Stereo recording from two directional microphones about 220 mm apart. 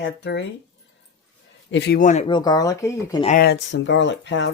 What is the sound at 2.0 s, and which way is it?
Speech, 35° left (ahead or behind).